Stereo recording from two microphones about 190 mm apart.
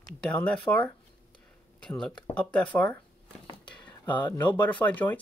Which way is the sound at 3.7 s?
10° left (ahead or behind).